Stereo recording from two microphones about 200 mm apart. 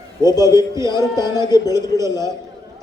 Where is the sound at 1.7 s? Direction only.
15° right (ahead or behind).